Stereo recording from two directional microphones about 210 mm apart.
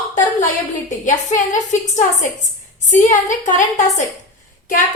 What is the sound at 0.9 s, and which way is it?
Speech, 35° left (ahead or behind).